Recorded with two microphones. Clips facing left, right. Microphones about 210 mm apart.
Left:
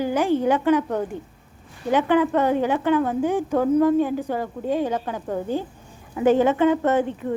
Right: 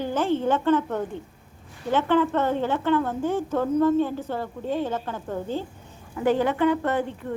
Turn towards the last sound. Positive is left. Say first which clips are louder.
# left 4 dB
turn(degrees=20)  # may be behind; listen again after turning